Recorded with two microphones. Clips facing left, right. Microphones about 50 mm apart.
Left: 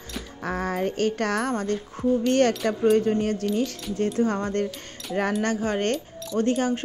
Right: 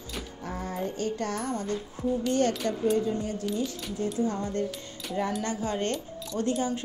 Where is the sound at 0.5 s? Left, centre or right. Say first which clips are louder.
Left 7 dB; left.